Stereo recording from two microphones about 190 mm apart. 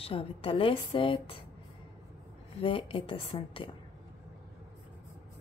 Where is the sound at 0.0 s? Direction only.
30° left (ahead or behind).